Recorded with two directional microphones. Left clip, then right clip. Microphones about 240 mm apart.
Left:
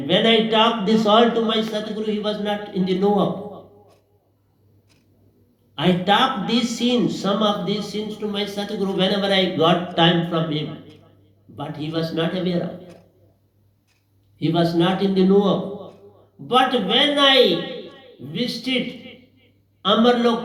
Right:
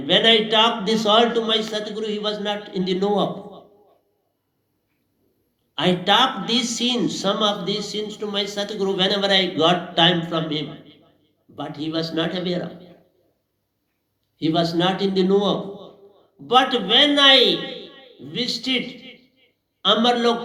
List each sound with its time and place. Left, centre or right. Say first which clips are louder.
0.1 s a man's voice: right 1 dB; right
5.7 s a man's voice: right 1 dB; right
14.3 s a man's voice: left 1 dB; right